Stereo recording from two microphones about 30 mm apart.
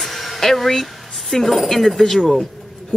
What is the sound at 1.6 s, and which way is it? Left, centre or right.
Speech, centre.